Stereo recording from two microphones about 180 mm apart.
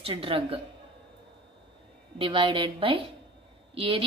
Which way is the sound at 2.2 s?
30° right (ahead or behind).